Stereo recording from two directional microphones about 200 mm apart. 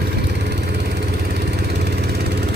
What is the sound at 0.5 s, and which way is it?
Vehicle, 55° right (ahead or behind).